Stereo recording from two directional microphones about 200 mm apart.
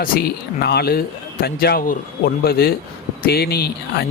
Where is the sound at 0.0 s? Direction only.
50° left (ahead or behind).